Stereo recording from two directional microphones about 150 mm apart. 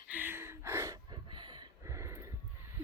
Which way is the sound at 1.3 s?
30° right (ahead or behind).